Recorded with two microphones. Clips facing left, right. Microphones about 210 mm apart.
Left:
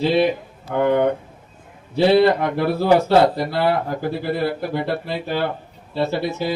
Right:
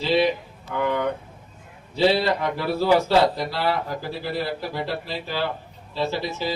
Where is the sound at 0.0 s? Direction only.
55° left (ahead or behind).